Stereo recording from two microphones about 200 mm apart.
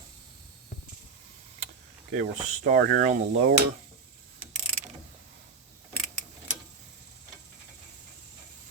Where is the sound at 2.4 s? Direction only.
40° right (ahead or behind).